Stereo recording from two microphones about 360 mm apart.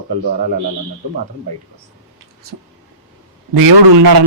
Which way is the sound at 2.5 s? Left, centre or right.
Right.